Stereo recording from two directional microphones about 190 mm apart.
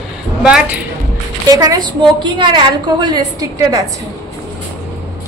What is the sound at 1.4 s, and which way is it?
A woman's voice, 20° right (ahead or behind).